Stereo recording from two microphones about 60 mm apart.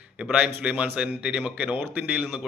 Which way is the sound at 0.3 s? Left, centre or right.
Right.